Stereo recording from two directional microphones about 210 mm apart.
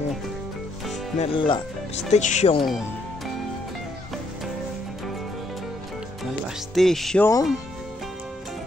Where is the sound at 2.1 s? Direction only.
35° left (ahead or behind).